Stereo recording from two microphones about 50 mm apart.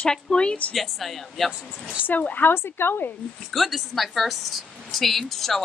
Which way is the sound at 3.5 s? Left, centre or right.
Centre.